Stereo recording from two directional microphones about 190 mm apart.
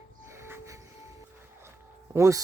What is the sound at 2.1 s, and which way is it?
Speech, 15° right (ahead or behind).